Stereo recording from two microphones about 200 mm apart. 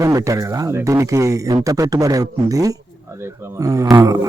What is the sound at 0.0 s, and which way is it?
Speech, 15° right (ahead or behind).